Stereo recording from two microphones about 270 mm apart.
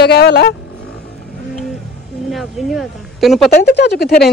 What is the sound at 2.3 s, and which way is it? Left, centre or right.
Speech, centre.